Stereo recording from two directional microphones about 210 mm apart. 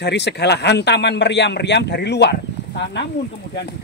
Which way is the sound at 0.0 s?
55° left (ahead or behind).